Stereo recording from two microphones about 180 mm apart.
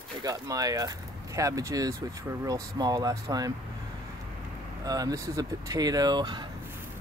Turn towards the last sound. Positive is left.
turn(degrees=-25)  # may be behind; listen again after turning